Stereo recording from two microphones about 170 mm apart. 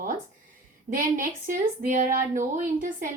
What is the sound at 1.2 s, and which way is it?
A woman's voice, 50° right (ahead or behind).